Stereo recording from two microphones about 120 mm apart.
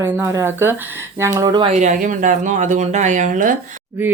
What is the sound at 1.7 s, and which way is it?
Speech, 85° right.